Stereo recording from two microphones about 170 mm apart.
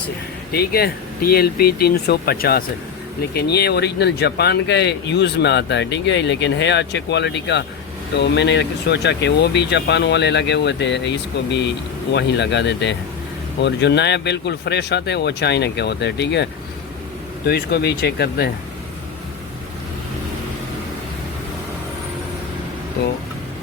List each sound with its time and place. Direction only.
0.5 s speech: 65° left (ahead or behind); by 11.1 s 90° left
12.1 s speech: 90° left
17.4 s speech: 70° left (ahead or behind)